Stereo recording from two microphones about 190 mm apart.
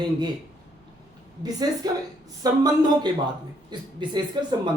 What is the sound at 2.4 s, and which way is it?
Speech, 20° right (ahead or behind).